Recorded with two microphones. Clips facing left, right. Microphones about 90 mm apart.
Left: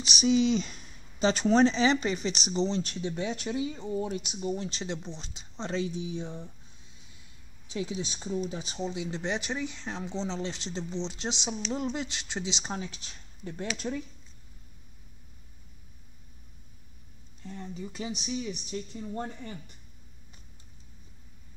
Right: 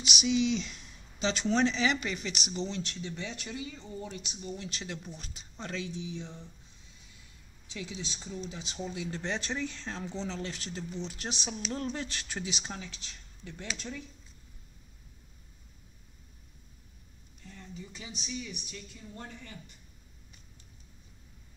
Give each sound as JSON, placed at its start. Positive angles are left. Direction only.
{"t": 0.0, "sound": "speech", "side_deg": 35}
{"t": 3.3, "sound": "speech", "side_deg": 45}
{"t": 4.6, "sound": "speech", "side_deg": 30}
{"t": 7.7, "sound": "speech", "side_deg": 40}
{"t": 8.7, "sound": "speech", "side_deg": 20}
{"t": 13.4, "sound": "speech", "side_deg": 40}
{"t": 17.5, "sound": "speech", "side_deg": 35}